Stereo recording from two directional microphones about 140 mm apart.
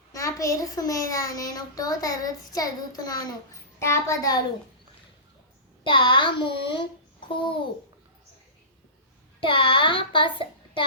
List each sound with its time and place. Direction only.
0.1 s a child's voice: 25° left (ahead or behind)
5.8 s a child's voice: 35° left (ahead or behind)
9.4 s child singing: 40° left (ahead or behind)